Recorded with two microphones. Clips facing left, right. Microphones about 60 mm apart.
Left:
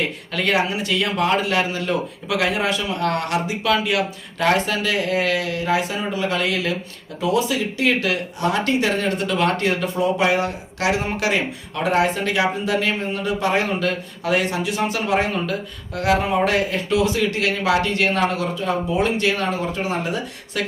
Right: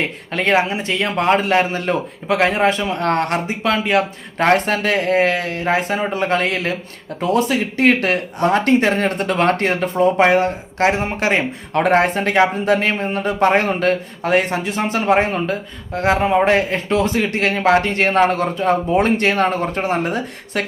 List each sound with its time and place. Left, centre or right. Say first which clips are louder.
0.0 s speech: right 3 dB; right